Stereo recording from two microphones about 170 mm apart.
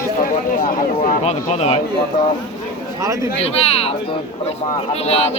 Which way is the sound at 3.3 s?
35° left (ahead or behind).